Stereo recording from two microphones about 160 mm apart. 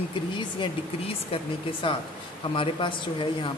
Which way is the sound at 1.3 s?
35° left (ahead or behind).